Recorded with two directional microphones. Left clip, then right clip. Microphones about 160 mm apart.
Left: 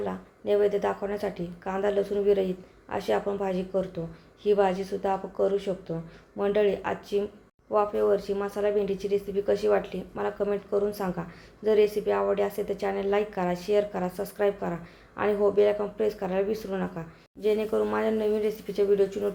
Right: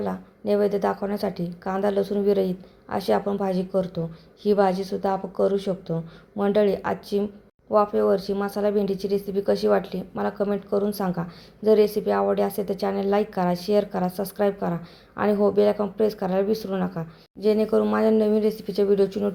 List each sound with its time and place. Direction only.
0.0 s a woman's voice: 35° right (ahead or behind)